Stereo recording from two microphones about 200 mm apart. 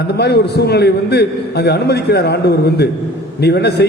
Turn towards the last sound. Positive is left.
turn(degrees=55)  # may be behind; listen again after turning